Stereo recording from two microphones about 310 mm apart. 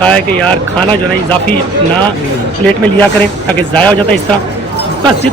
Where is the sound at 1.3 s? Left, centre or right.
Centre.